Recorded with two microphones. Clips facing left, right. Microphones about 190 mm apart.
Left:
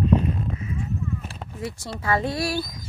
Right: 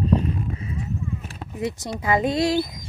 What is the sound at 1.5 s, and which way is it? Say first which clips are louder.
Speech: right 6 dB; 20° right (ahead or behind).